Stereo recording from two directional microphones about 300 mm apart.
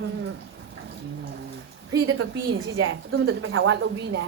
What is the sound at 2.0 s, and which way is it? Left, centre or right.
Speech, right.